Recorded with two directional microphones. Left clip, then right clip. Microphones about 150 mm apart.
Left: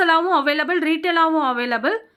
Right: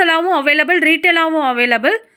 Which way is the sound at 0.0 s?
15° right (ahead or behind).